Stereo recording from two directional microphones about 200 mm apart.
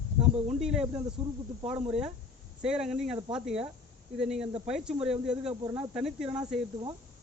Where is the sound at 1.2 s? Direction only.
30° right (ahead or behind).